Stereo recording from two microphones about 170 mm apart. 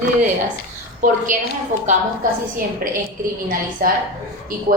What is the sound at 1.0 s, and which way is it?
Speech, 50° right (ahead or behind).